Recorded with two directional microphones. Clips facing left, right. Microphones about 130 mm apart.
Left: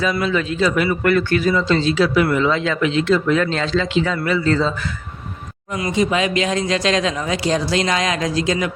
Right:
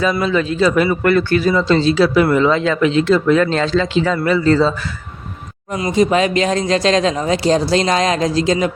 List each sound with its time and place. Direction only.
0.0 s speech: 35° right (ahead or behind)
5.7 s speech: 35° right (ahead or behind)